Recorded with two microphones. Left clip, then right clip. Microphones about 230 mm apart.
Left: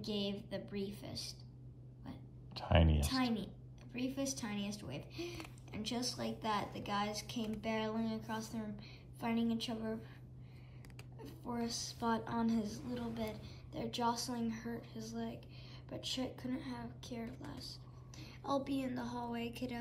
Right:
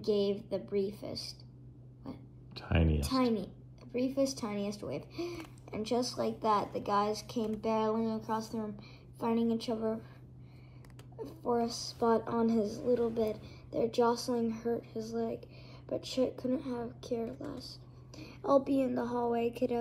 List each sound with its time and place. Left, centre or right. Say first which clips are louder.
0.0 s speech: right 10 dB; right
2.7 s a woman's voice: right 2 dB; right
11.1 s a woman's voice: right 11 dB; right